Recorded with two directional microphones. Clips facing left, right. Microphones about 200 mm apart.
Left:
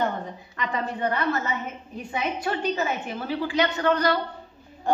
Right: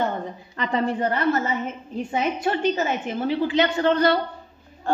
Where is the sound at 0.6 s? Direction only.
30° right (ahead or behind).